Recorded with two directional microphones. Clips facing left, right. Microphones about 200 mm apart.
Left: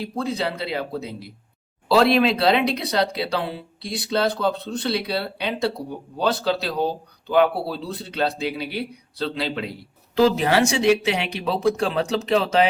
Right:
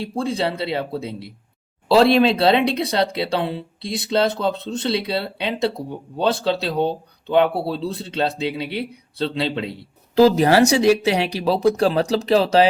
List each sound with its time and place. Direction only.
0.0 s speech: 30° right (ahead or behind)
10.2 s speech: 40° right (ahead or behind)